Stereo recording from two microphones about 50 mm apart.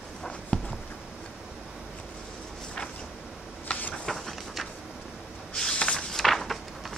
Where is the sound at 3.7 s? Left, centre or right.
Left.